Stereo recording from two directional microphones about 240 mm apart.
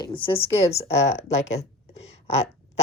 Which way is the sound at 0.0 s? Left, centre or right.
Left.